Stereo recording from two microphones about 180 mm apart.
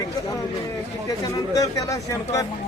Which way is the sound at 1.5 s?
20° left (ahead or behind).